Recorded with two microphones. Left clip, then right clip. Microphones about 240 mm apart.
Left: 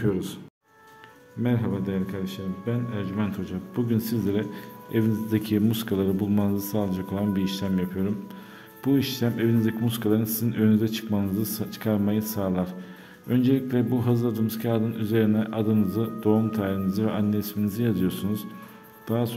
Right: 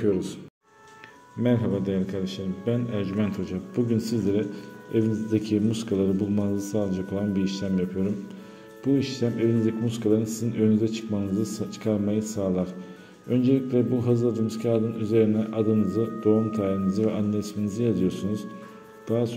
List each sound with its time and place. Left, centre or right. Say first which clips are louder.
0.0 s speech: right 3 dB; centre
1.4 s a man's voice: right 3 dB; centre
8.8 s a man's voice: even; left